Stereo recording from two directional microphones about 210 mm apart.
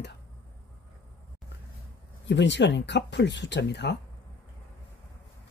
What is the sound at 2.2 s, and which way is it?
Speech, 55° left (ahead or behind).